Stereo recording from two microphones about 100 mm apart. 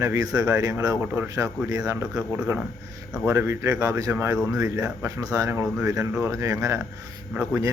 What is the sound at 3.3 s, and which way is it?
Speech, 25° right (ahead or behind).